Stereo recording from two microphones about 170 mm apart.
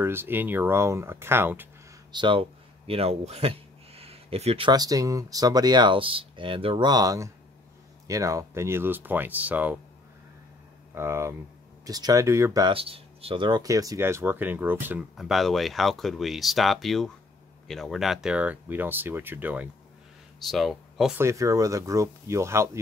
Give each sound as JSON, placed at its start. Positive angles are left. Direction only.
{"t": 0.0, "sound": "speech", "side_deg": -15}
{"t": 2.1, "sound": "speech", "side_deg": -30}
{"t": 11.0, "sound": "speech", "side_deg": -15}
{"t": 12.7, "sound": "speech", "side_deg": -35}
{"t": 21.2, "sound": "speech", "side_deg": -15}